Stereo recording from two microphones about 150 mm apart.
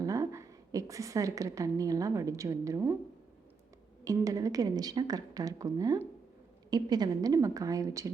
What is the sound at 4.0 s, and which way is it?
A woman's voice, 20° right (ahead or behind).